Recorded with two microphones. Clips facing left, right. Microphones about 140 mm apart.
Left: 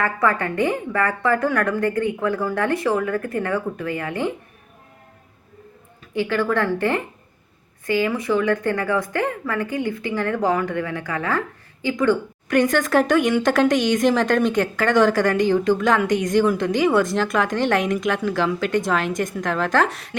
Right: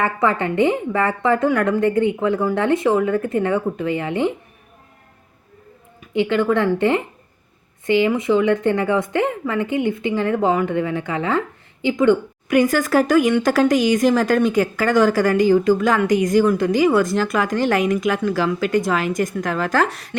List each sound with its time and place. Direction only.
0.0 s a woman's voice: 20° right (ahead or behind)
6.0 s a woman's voice: 20° right (ahead or behind)
12.5 s speech: 5° right (ahead or behind)